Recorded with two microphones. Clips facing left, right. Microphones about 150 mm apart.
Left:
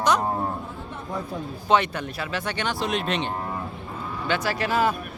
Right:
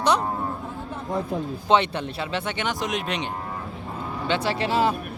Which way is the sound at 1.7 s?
25° right (ahead or behind).